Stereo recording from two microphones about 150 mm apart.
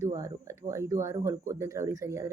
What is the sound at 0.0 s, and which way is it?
Speech, 20° right (ahead or behind).